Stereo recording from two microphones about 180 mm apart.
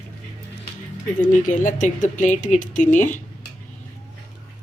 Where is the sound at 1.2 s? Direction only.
45° left (ahead or behind).